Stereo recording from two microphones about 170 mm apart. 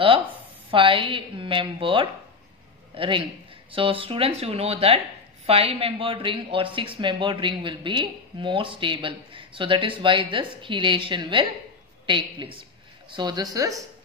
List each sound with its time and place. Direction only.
0.7 s a woman's voice: 30° right (ahead or behind)